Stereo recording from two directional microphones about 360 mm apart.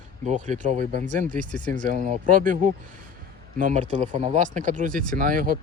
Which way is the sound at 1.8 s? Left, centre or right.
Right.